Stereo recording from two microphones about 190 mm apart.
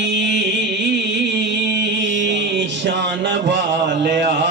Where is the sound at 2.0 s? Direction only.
75° right (ahead or behind).